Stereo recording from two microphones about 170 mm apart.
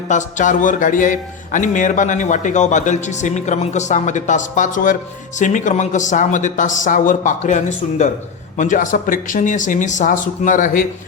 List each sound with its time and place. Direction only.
0.1 s speech: 45° left (ahead or behind)